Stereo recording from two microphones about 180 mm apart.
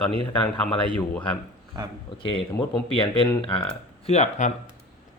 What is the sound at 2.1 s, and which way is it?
Speech, 30° left (ahead or behind).